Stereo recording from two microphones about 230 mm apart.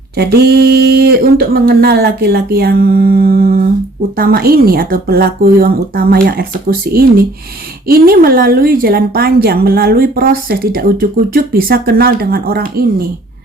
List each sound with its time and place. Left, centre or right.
0.2 s a woman's voice: right